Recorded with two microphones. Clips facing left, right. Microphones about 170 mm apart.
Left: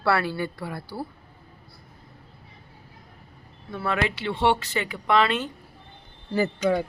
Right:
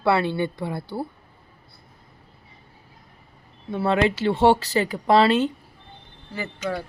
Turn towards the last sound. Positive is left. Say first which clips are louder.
# left 8 dB
turn(degrees=40)  # may be behind; listen again after turning